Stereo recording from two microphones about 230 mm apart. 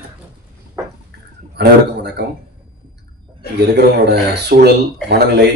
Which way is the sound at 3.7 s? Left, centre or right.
Right.